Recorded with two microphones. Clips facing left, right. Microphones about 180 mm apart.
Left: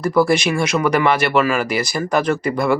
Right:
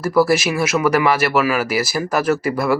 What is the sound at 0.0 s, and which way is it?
Speech, 5° right (ahead or behind).